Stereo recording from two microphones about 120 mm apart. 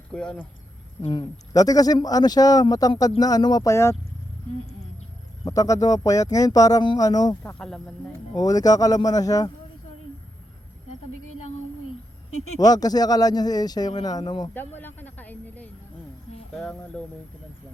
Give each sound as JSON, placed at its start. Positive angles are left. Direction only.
{"t": 0.1, "sound": "speech", "side_deg": 10}
{"t": 1.0, "sound": "speech", "side_deg": 40}
{"t": 5.5, "sound": "speech", "side_deg": 25}
{"t": 7.6, "sound": "speech", "side_deg": 5}
{"t": 8.4, "sound": "speech", "side_deg": 30}
{"t": 12.5, "sound": "speech", "side_deg": 30}
{"t": 14.5, "sound": "speech", "side_deg": 15}